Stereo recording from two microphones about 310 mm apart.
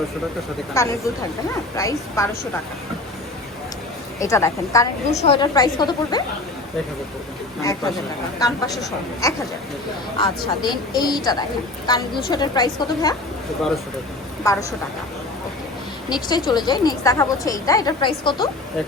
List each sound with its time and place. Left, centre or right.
0.8 s a woman's voice: centre
4.2 s a woman's voice: centre
8.4 s a woman's voice: centre
14.5 s a woman's voice: centre
16.0 s a woman's voice: centre